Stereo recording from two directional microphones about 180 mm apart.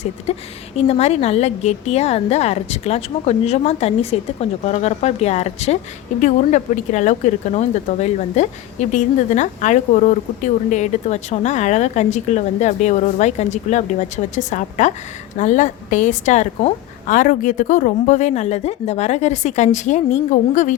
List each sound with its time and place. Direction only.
0.3 s a woman's voice: 35° left (ahead or behind)